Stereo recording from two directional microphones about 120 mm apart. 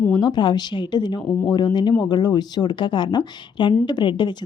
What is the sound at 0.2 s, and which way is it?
Speech, 40° left (ahead or behind).